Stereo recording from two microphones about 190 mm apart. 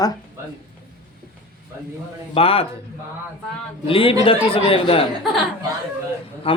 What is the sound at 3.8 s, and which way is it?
A man's voice, 30° left (ahead or behind).